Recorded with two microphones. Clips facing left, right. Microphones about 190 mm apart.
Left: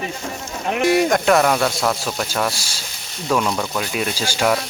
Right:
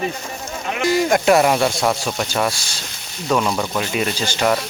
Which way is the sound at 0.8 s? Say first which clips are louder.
Left 2 dB; 65° left (ahead or behind).